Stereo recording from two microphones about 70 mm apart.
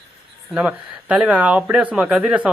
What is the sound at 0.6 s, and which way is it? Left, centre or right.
Speech, centre.